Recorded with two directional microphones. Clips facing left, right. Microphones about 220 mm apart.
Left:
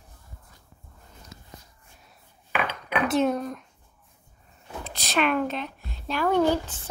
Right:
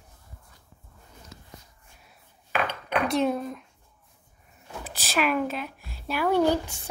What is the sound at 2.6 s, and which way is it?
Dishes, 5° left (ahead or behind).